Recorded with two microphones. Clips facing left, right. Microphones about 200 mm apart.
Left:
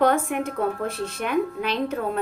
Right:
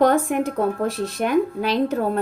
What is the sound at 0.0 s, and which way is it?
A woman's voice, 35° right (ahead or behind).